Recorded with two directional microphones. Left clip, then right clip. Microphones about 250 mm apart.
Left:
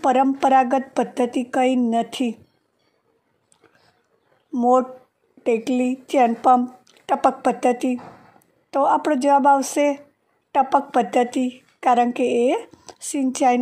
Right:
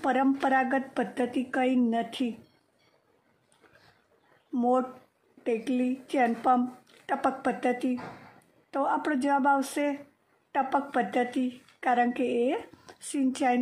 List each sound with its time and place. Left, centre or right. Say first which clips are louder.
0.0 s a woman's voice: left 9 dB; left
4.6 s a woman's voice: left 9 dB; left